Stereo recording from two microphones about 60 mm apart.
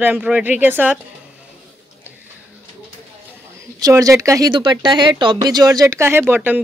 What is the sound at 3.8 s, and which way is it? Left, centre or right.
Speech, right.